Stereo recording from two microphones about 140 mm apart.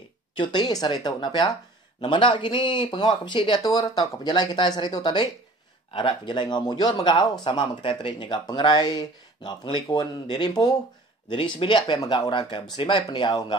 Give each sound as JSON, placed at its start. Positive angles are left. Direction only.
{"t": 0.4, "sound": "speech", "side_deg": 30}